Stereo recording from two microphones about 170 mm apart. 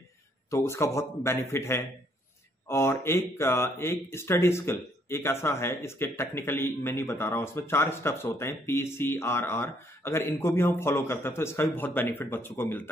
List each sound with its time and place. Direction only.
0.5 s speech: 15° left (ahead or behind)